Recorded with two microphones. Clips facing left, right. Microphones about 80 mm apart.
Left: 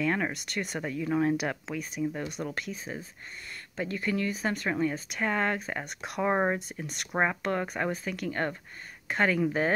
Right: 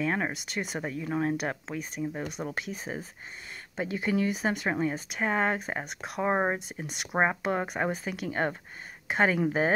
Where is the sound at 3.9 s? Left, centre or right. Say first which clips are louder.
Right 3 dB; centre.